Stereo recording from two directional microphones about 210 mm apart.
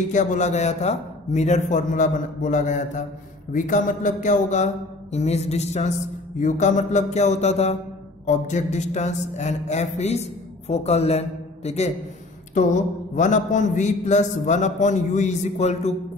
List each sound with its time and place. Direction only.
0.1 s a man's voice: 35° left (ahead or behind)